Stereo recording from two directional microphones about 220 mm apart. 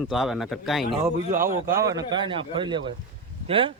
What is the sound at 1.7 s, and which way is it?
A man's voice, 15° right (ahead or behind).